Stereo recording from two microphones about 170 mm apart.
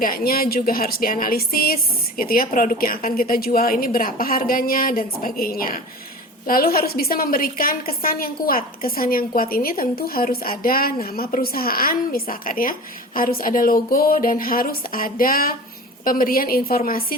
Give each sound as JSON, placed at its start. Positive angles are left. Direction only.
{"t": 0.0, "sound": "a woman's voice", "side_deg": 60}